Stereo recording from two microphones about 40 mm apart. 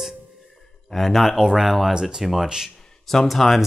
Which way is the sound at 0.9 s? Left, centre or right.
Centre.